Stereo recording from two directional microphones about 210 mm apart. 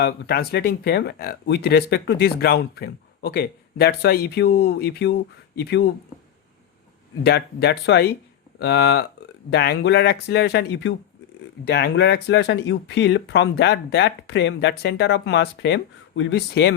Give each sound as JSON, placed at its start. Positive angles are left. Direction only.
{"t": 0.0, "sound": "speech", "side_deg": 50}
{"t": 7.3, "sound": "speech", "side_deg": 50}